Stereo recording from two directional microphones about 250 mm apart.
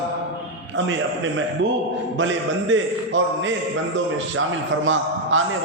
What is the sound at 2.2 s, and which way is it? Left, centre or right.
A man's voice, right.